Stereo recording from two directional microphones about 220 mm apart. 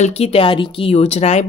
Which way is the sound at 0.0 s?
25° left (ahead or behind).